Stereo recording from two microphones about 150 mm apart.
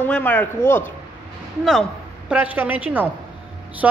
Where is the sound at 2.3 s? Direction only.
10° right (ahead or behind).